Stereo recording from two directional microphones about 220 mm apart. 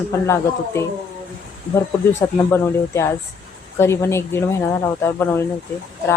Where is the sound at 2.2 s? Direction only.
10° left (ahead or behind).